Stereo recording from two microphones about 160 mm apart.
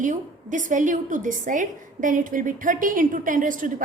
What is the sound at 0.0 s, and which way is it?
A woman's voice, 50° right (ahead or behind).